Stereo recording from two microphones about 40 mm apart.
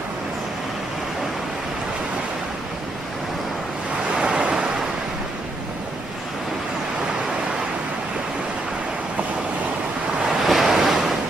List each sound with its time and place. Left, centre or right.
4.2 s waves: right
10.4 s waves: centre